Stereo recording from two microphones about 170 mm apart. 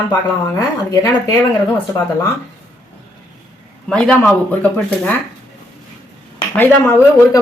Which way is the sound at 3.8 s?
5° left (ahead or behind).